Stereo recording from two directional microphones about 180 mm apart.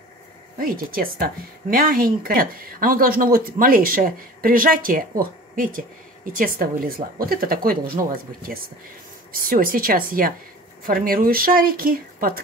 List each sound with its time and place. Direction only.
0.6 s speech: 55° right (ahead or behind)